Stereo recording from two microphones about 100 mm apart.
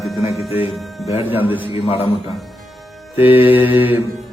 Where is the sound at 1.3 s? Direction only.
20° right (ahead or behind).